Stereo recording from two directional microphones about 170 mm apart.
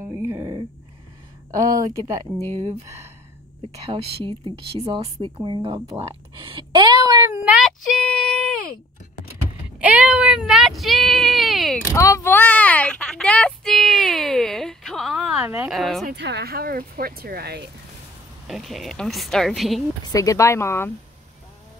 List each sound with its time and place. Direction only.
0.1 s a sound: 15° right (ahead or behind)
1.5 s speech: 20° right (ahead or behind)
3.9 s speech: 30° right (ahead or behind)
8.0 s a sound: 5° left (ahead or behind)
9.8 s speech: 5° right (ahead or behind)
11.9 s a sound: 15° left (ahead or behind); by 16.1 s centre (ahead or behind)
16.2 s speech: 85° right; by 17.6 s 65° right (ahead or behind)
18.5 s speech: centre (ahead or behind)
20.1 s speech: 20° left (ahead or behind)